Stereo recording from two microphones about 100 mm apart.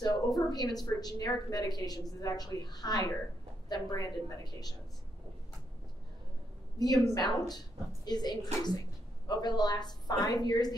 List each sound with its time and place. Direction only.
0.0 s a woman's voice: 40° left (ahead or behind)
6.8 s speech: 40° left (ahead or behind)